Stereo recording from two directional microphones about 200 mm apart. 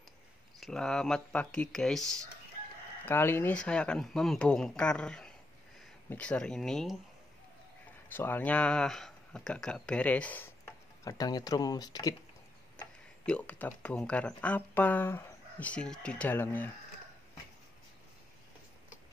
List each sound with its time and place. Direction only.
0.6 s speech: 5° left (ahead or behind)
8.1 s speech: 10° left (ahead or behind)
11.1 s speech: 20° left (ahead or behind)
13.2 s speech: 5° left (ahead or behind)